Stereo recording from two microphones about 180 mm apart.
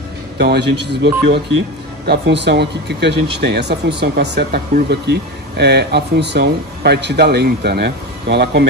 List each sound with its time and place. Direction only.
0.4 s speech: 65° right (ahead or behind)